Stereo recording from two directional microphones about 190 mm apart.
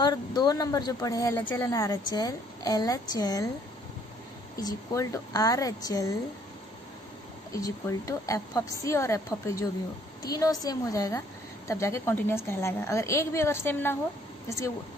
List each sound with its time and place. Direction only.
0.0 s speech: 20° left (ahead or behind)
4.6 s speech: 15° left (ahead or behind)
7.5 s a woman's voice: 15° left (ahead or behind)